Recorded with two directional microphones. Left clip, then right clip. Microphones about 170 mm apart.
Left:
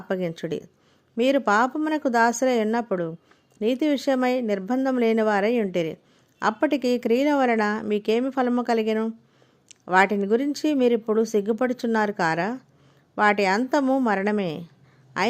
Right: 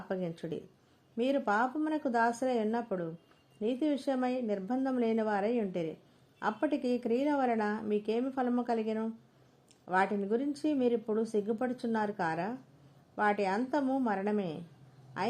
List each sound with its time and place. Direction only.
0.1 s a woman's voice: 25° left (ahead or behind)